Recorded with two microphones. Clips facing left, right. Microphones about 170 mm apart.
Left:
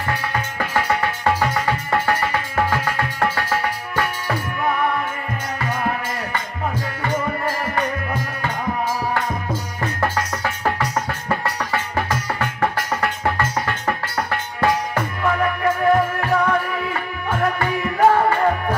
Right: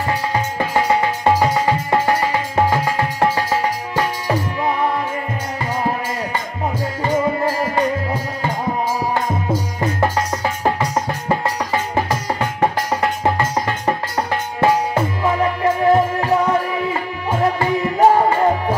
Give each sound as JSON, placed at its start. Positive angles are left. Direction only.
{"t": 0.1, "sound": "music", "side_deg": -20}
{"t": 7.0, "sound": "music", "side_deg": -10}
{"t": 9.5, "sound": "music", "side_deg": -15}